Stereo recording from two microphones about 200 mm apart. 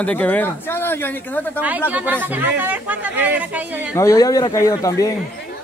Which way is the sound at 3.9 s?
15° left (ahead or behind).